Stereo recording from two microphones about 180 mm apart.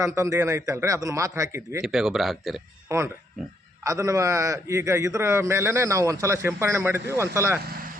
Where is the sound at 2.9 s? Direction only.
15° right (ahead or behind).